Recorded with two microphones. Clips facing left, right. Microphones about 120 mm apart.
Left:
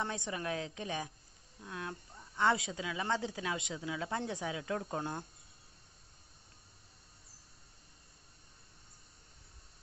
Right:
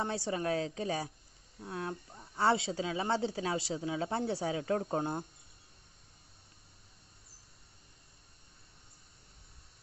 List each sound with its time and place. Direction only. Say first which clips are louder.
0.0 s a woman's voice: right 4 dB; 30° right (ahead or behind)